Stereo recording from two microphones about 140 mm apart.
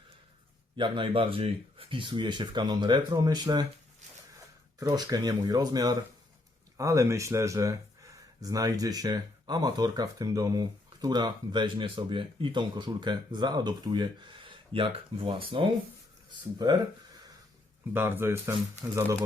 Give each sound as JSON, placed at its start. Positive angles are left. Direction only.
{"t": 0.8, "sound": "speech", "side_deg": -35}
{"t": 4.4, "sound": "a sound", "side_deg": -30}
{"t": 5.0, "sound": "speech", "side_deg": -30}
{"t": 17.9, "sound": "speech", "side_deg": -15}